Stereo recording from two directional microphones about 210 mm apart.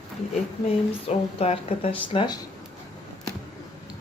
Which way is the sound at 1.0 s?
30° left (ahead or behind).